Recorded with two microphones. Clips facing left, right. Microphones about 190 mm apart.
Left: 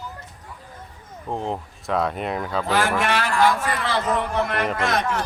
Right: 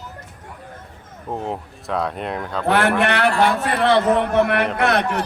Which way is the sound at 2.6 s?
60° right (ahead or behind).